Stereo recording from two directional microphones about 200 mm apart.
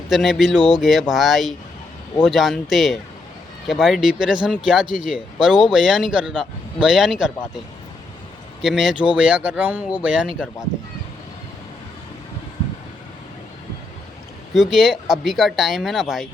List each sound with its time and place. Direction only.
0.1 s speech: centre (ahead or behind)
8.6 s speech: centre (ahead or behind)
10.3 s speech: 10° left (ahead or behind)
14.5 s speech: centre (ahead or behind)